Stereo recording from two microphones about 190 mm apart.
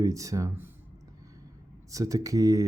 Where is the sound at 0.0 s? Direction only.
15° right (ahead or behind).